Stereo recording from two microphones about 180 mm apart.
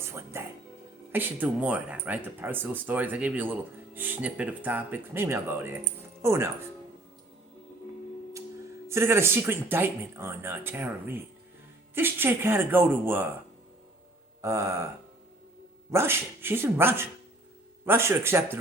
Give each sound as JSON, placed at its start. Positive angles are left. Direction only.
{"t": 0.0, "sound": "speech", "side_deg": -15}
{"t": 8.9, "sound": "speech", "side_deg": -15}
{"t": 14.4, "sound": "speech", "side_deg": -15}
{"t": 15.9, "sound": "speech", "side_deg": -15}